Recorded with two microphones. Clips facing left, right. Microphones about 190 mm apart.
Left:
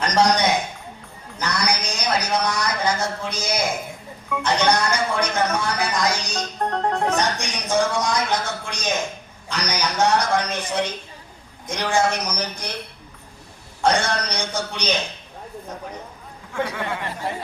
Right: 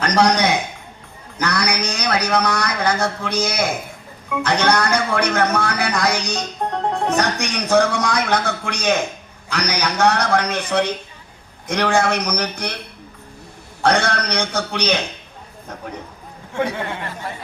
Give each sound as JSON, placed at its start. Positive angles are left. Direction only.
{"t": 0.0, "sound": "a man's voice", "side_deg": -60}
{"t": 6.4, "sound": "music", "side_deg": -10}
{"t": 7.2, "sound": "a man's voice", "side_deg": -65}
{"t": 13.8, "sound": "a man's voice", "side_deg": -65}